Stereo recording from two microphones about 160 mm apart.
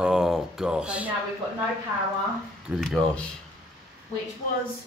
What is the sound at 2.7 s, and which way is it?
Speech, centre (ahead or behind).